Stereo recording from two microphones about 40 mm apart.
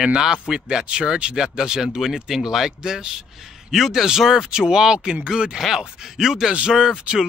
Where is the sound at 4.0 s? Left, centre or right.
Centre.